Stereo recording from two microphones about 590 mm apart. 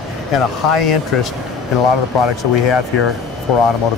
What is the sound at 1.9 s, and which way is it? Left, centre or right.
Speech, left.